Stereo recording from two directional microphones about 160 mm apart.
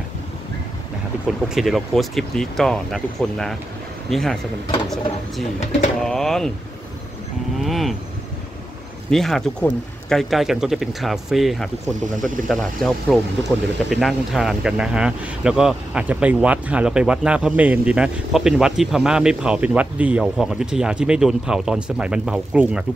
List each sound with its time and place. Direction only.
1.2 s speech: centre (ahead or behind)
5.6 s speech: 45° left (ahead or behind)
5.9 s a sound: 5° left (ahead or behind)
7.5 s speech: centre (ahead or behind)
9.1 s speech: centre (ahead or behind)